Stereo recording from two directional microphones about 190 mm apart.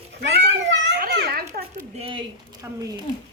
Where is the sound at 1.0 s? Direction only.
55° right (ahead or behind).